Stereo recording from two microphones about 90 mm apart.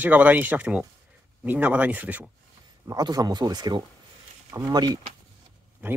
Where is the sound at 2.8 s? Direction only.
45° right (ahead or behind).